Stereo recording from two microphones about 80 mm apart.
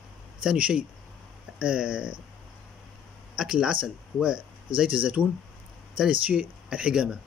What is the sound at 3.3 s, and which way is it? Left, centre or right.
Speech, centre.